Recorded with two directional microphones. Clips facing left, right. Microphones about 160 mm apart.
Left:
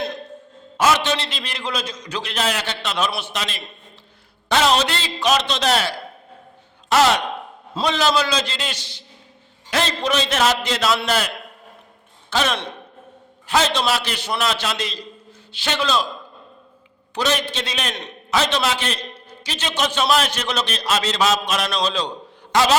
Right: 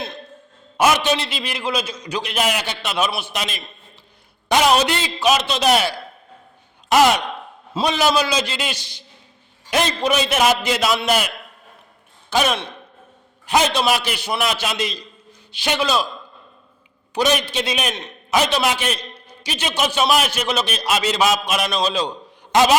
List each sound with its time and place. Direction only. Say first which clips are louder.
0.8 s a man's voice: right 1 dB; 15° right (ahead or behind)
6.9 s a man's voice: right 2 dB; 15° right (ahead or behind)
12.3 s a man's voice: right 2 dB; 15° right (ahead or behind)
17.2 s a man's voice: right 3 dB; 15° right (ahead or behind)
22.5 s a man's voice: right 3 dB; 20° right (ahead or behind)